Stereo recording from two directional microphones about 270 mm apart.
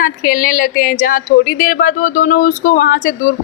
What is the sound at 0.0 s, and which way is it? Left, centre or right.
A woman's voice, left.